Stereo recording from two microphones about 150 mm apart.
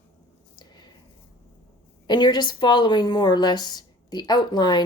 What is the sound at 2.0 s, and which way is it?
A woman's voice, 30° left (ahead or behind).